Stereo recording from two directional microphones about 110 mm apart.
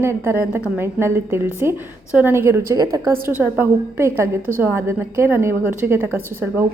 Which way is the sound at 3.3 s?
20° right (ahead or behind).